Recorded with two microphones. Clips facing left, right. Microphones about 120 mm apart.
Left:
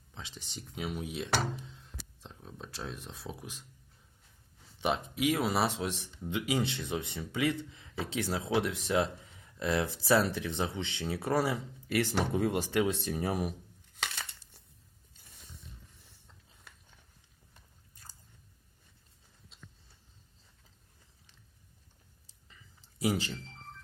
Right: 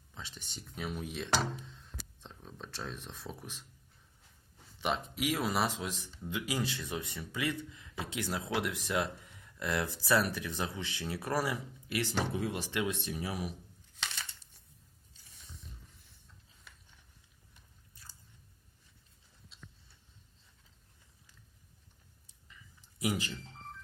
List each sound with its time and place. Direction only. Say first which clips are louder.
0.8 s speech: left 2 dB; 10° left (ahead or behind)
4.9 s speech: left 3 dB; 25° left (ahead or behind)
11.9 s speech: left 4 dB; 45° left (ahead or behind)
12.8 s speech: left 5 dB; 35° left (ahead or behind)
14.0 s crumpling: left 3 dB; 60° left (ahead or behind)
22.4 s a sound: right 1 dB; 30° left (ahead or behind)